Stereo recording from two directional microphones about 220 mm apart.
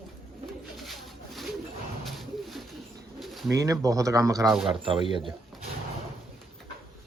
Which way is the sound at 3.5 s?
15° right (ahead or behind).